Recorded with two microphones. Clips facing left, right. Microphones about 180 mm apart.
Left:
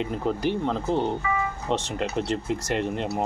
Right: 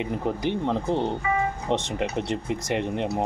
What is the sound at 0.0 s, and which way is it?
Speech, 15° right (ahead or behind).